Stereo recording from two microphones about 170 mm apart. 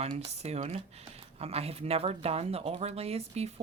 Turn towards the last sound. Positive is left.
turn(degrees=-35)  # may be behind; listen again after turning